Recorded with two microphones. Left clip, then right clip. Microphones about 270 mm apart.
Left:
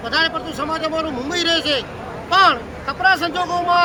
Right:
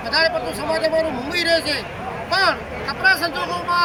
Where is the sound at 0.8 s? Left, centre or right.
Centre.